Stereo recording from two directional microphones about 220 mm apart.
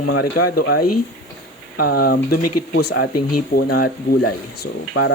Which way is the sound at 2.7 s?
50° left (ahead or behind).